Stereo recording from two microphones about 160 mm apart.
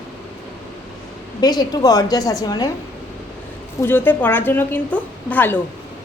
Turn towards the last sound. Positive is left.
turn(degrees=10)  # may be behind; listen again after turning